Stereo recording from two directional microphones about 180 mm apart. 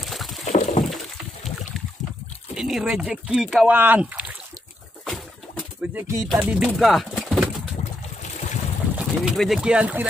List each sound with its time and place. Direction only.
0.0 s rowboat: centre (ahead or behind)
0.5 s a sound: 45° left (ahead or behind)
2.5 s speech: centre (ahead or behind)
5.0 s a sound: 5° left (ahead or behind)
5.9 s speech: 15° right (ahead or behind)
6.2 s speech: centre (ahead or behind)
8.9 s speech: centre (ahead or behind)